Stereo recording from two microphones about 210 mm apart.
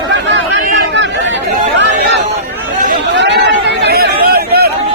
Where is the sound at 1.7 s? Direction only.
55° right (ahead or behind).